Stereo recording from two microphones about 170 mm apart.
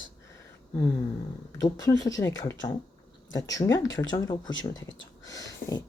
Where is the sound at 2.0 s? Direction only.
20° left (ahead or behind).